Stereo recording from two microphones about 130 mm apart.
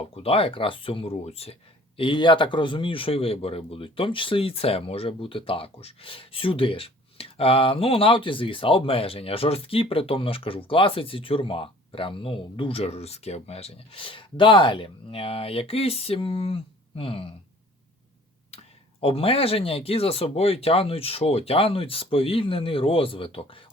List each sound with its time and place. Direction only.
0.0 s a man's voice: 50° left (ahead or behind)
2.0 s a man's voice: 40° left (ahead or behind)
18.5 s a man's voice: 50° left (ahead or behind)